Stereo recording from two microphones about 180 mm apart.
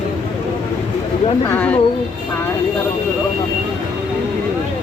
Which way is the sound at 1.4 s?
10° left (ahead or behind).